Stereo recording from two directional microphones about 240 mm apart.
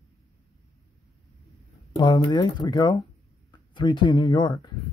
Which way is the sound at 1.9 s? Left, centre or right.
Centre.